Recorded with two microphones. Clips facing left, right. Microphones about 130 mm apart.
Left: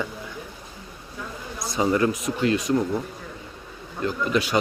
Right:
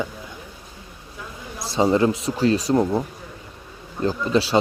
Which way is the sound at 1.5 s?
30° right (ahead or behind).